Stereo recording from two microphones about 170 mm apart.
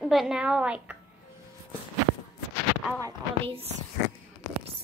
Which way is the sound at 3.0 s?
30° right (ahead or behind).